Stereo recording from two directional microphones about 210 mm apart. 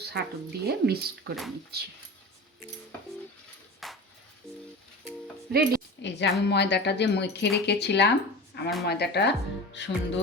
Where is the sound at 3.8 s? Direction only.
Centre (ahead or behind).